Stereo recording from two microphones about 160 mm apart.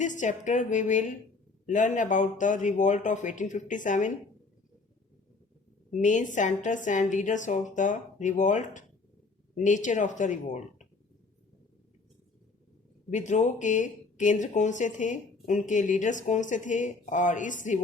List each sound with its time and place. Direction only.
0.0 s speech: 50° left (ahead or behind)
5.9 s speech: 50° left (ahead or behind)
13.1 s speech: 50° left (ahead or behind)